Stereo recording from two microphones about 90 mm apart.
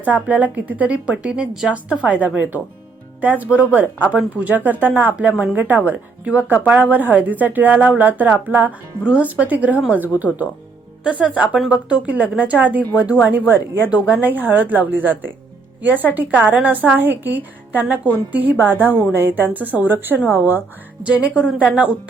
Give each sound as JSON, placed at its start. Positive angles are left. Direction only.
{"t": 0.0, "sound": "a woman's voice", "side_deg": -15}